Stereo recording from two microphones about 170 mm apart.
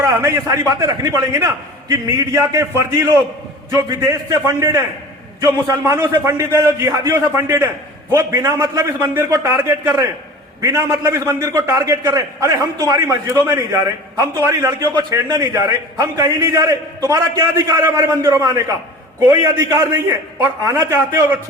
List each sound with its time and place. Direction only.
0.0 s a man's voice: 20° right (ahead or behind)